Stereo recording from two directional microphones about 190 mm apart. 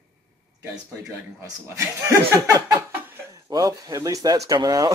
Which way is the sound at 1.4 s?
15° right (ahead or behind).